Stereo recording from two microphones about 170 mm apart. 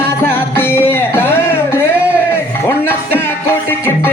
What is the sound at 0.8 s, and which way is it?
Music, 15° left (ahead or behind).